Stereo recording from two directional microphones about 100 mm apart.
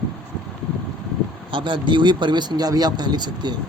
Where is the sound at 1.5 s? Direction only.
50° right (ahead or behind).